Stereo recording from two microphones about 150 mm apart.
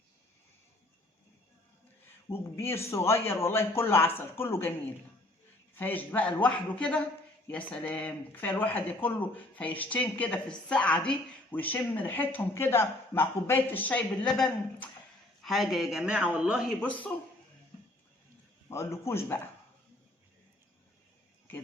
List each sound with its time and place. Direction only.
2.3 s speech: 15° left (ahead or behind)
5.7 s a man's voice: 10° left (ahead or behind); by 16.7 s 5° right (ahead or behind)
16.8 s speech: 10° left (ahead or behind)
18.7 s speech: 20° left (ahead or behind)